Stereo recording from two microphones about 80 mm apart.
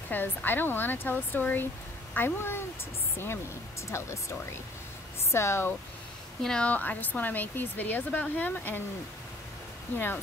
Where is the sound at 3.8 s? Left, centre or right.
Left.